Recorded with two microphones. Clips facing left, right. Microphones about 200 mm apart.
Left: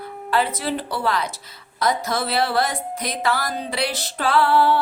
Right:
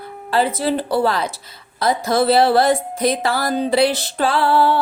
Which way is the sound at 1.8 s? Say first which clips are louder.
Right 5 dB; 30° right (ahead or behind).